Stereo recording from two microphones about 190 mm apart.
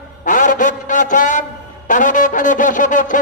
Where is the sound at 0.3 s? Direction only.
45° left (ahead or behind).